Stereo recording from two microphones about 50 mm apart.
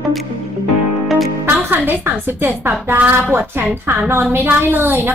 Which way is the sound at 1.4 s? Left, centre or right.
Right.